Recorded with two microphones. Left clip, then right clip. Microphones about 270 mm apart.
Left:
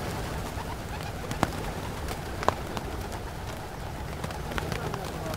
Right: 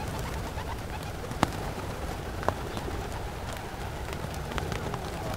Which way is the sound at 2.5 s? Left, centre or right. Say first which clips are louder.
Left 3 dB; centre.